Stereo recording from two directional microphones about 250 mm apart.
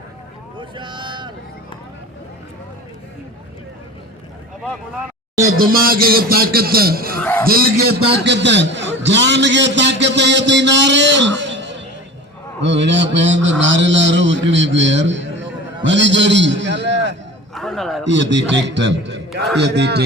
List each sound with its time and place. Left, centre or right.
0.8 s a sound: centre
5.4 s a man's voice: right
7.2 s a man's voice: centre
7.4 s a man's voice: right
17.5 s a man's voice: centre
18.0 s a man's voice: right